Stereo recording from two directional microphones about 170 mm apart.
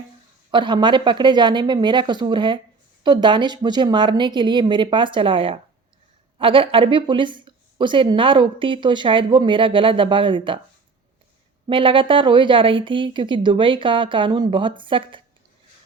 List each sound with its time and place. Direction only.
0.5 s a woman's voice: 25° right (ahead or behind)
11.7 s a woman's voice: 30° right (ahead or behind)